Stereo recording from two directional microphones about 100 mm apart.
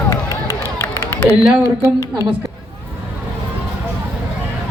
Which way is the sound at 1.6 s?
30° right (ahead or behind).